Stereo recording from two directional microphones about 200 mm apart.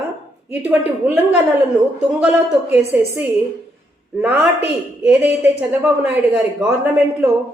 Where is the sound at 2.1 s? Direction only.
5° right (ahead or behind).